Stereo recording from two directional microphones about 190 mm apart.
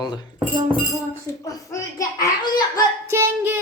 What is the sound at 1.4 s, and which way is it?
Speech, 15° left (ahead or behind).